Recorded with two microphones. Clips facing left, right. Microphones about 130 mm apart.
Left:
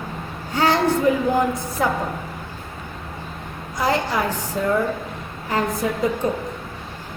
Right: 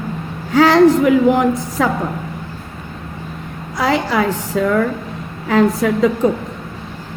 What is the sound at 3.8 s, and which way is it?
A woman's voice, 90° right.